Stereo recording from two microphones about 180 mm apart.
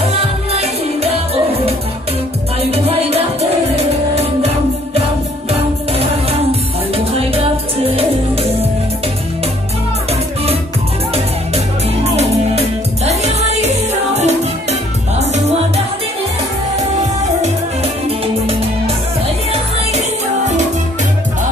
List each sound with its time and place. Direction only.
0.0 s music: 35° right (ahead or behind)
7.9 s music: 35° right (ahead or behind)
11.1 s music: 35° right (ahead or behind)